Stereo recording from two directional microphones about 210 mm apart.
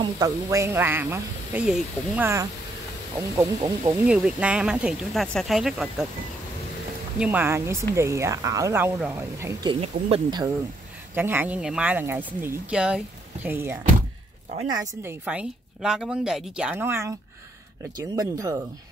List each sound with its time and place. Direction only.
0.0 s speech: 15° right (ahead or behind)
4.1 s speech: 5° right (ahead or behind)
7.2 s speech: 10° right (ahead or behind)
11.1 s speech: 10° right (ahead or behind)
15.2 s speech: 5° right (ahead or behind)